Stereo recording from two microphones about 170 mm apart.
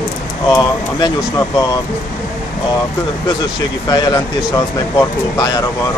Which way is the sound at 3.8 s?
25° left (ahead or behind).